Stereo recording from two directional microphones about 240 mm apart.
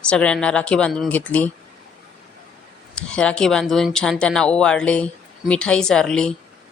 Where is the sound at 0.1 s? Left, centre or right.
Centre.